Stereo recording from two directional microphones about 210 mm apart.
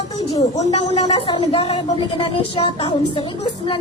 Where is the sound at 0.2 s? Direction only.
30° left (ahead or behind).